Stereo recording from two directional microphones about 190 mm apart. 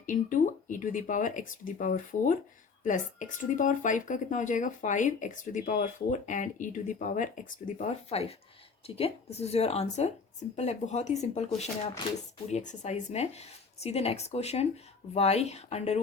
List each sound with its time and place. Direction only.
0.0 s speech: 40° left (ahead or behind)